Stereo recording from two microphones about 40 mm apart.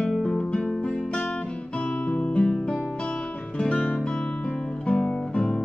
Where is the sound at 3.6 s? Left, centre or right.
Left.